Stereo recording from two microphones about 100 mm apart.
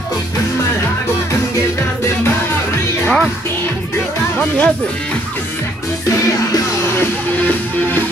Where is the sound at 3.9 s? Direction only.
20° left (ahead or behind).